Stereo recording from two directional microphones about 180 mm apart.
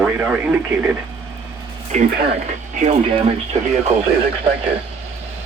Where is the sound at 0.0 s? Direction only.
10° right (ahead or behind).